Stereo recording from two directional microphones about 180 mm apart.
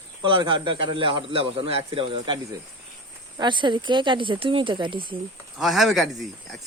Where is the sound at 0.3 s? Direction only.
25° right (ahead or behind).